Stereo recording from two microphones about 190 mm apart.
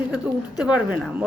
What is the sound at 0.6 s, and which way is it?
Speech, 5° right (ahead or behind).